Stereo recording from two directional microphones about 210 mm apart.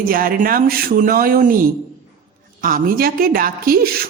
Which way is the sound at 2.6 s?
45° right (ahead or behind).